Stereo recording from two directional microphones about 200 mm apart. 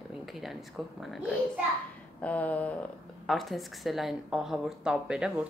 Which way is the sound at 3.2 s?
Centre (ahead or behind).